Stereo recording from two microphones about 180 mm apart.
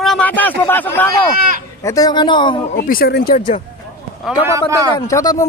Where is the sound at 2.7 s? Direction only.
55° left (ahead or behind).